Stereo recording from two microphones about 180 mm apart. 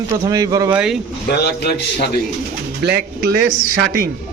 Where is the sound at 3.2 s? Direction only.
60° right (ahead or behind).